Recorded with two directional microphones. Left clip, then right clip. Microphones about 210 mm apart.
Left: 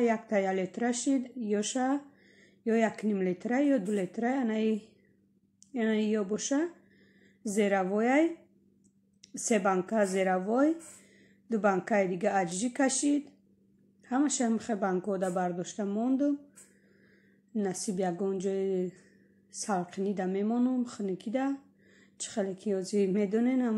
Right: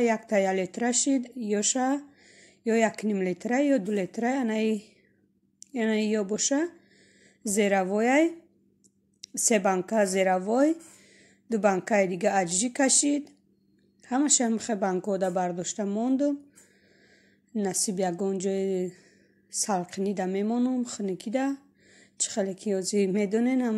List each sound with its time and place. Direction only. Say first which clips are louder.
0.0 s speech: right 4 dB; 40° right (ahead or behind)
17.6 s speech: right 4 dB; 40° right (ahead or behind)